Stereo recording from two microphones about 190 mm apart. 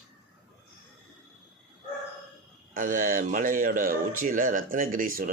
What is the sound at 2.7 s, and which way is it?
Speech, 45° right (ahead or behind).